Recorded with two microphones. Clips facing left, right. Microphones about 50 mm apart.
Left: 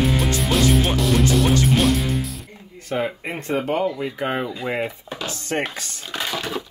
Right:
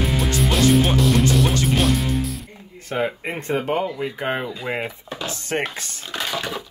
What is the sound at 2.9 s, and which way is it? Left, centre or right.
Speech, centre.